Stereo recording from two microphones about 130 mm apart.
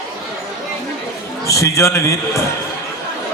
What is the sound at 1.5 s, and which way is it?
Speech, 25° left (ahead or behind).